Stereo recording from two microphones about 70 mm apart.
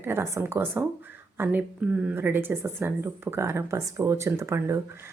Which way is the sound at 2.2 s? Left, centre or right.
Right.